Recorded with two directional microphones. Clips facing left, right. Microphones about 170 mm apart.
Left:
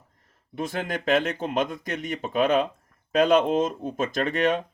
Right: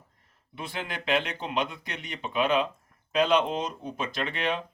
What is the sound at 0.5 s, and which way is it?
Speech, 45° left (ahead or behind).